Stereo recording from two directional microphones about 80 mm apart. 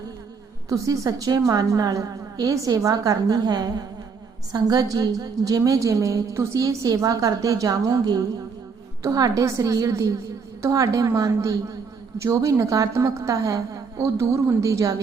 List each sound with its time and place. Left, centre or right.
0.7 s a woman's voice: right